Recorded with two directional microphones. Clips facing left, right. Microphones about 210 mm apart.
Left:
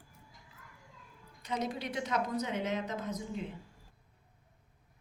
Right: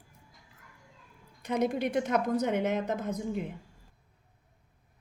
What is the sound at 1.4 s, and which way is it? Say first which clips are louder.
A woman's voice: right 8 dB; 55° right (ahead or behind).